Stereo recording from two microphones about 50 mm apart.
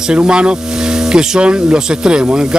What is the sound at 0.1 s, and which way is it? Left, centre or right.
Speech, centre.